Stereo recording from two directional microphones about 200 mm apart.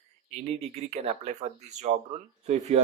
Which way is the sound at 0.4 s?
30° right (ahead or behind).